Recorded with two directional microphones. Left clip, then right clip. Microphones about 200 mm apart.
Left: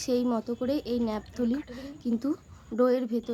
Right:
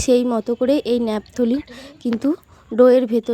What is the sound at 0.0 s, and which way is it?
A woman's voice, 35° right (ahead or behind).